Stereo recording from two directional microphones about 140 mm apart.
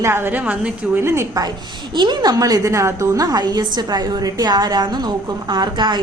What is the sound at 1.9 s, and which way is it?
A woman's voice, 30° right (ahead or behind).